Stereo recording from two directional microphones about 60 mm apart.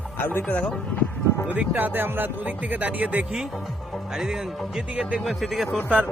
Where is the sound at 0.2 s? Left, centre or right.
Left.